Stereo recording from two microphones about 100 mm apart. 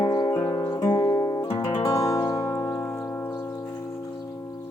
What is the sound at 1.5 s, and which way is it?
Music, 50° left (ahead or behind).